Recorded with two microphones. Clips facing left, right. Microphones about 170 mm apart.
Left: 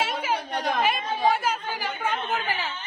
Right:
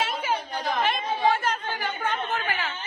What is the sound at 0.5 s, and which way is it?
Chatter, 65° left (ahead or behind).